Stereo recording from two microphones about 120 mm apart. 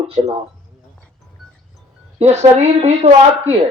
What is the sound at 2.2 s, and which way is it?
Speech, 65° right (ahead or behind).